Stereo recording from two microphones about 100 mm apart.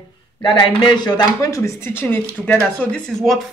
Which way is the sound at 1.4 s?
30° left (ahead or behind).